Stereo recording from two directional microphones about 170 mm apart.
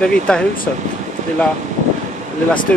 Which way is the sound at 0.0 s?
5° left (ahead or behind).